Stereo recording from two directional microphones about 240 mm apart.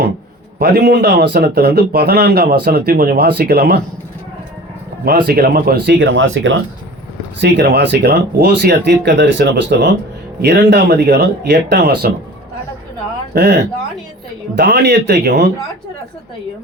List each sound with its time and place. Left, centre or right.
0.6 s speech: right
5.0 s speech: right
13.3 s speech: right